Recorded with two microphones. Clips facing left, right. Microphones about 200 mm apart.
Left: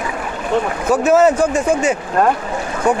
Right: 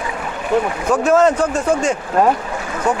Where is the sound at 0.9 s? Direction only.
5° left (ahead or behind).